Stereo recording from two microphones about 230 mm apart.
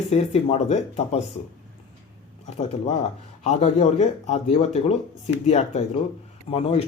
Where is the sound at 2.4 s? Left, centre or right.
Left.